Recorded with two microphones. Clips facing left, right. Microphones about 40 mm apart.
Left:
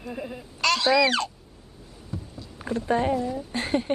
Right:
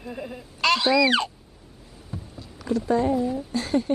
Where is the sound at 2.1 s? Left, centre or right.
Right.